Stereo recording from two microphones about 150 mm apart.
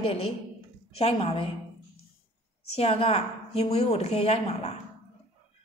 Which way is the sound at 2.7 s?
40° left (ahead or behind).